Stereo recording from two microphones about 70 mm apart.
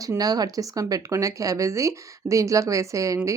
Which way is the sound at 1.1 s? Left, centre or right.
Right.